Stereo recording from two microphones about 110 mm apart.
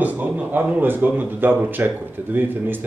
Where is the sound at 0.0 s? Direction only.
15° right (ahead or behind).